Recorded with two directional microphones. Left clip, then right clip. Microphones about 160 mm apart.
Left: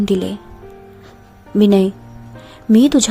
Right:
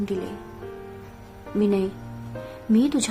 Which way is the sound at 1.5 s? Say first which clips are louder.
Left 10 dB; 50° left (ahead or behind).